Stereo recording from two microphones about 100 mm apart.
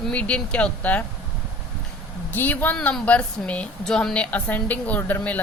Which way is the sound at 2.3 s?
20° left (ahead or behind).